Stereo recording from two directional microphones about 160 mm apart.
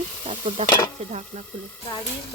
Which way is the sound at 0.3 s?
40° right (ahead or behind).